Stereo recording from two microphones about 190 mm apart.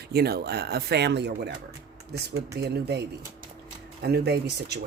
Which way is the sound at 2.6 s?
60° right (ahead or behind).